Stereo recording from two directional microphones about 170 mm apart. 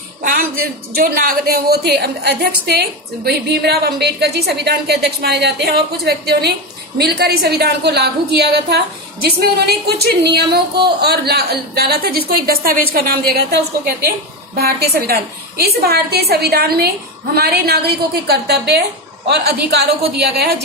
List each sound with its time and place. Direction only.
0.2 s music: 55° right (ahead or behind)
0.9 s a woman's voice: 60° right (ahead or behind)